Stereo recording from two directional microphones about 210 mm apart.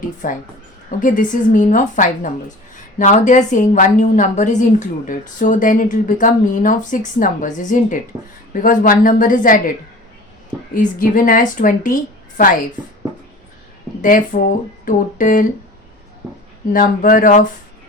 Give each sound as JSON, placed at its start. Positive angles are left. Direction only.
{"t": 0.2, "sound": "a woman's voice", "side_deg": 40}
{"t": 10.8, "sound": "a woman's voice", "side_deg": 40}
{"t": 14.0, "sound": "a woman's voice", "side_deg": 40}
{"t": 16.2, "sound": "speech", "side_deg": -15}
{"t": 16.7, "sound": "a woman's voice", "side_deg": 40}